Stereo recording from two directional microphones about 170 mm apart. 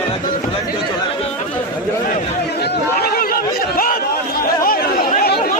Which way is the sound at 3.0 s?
60° left (ahead or behind).